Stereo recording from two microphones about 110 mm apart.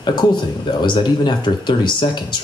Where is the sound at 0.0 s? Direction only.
45° left (ahead or behind).